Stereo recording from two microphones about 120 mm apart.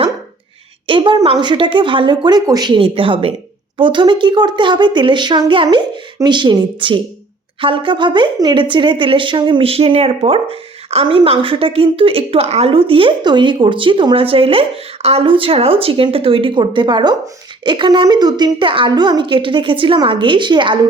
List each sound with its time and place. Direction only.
0.9 s a woman's voice: 45° right (ahead or behind)